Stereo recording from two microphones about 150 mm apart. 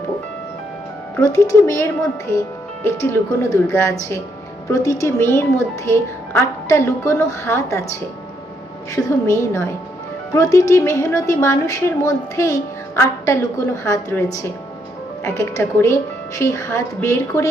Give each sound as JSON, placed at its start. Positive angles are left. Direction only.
{"t": 1.2, "sound": "a woman's voice", "side_deg": 20}
{"t": 9.0, "sound": "a woman's voice", "side_deg": 20}